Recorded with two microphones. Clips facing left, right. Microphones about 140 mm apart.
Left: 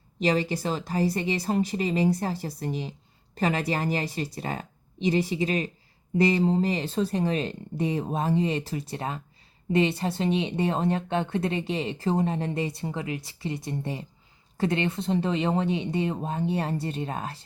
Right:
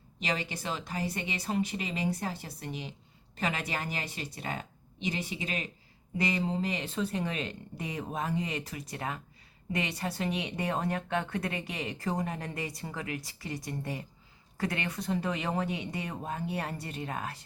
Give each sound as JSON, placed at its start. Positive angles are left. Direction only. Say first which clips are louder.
{"t": 0.2, "sound": "a woman's voice", "louder": "left 10 dB", "side_deg": 35}